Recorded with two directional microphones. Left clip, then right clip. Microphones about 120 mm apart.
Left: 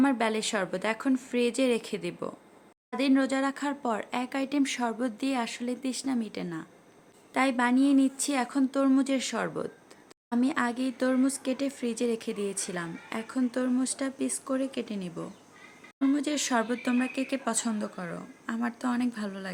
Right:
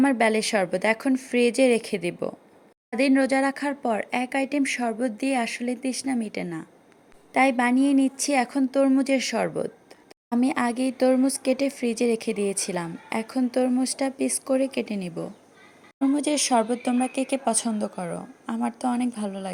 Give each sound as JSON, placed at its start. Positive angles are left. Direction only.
{"t": 0.0, "sound": "a woman's voice", "side_deg": -25}
{"t": 17.1, "sound": "speech", "side_deg": -20}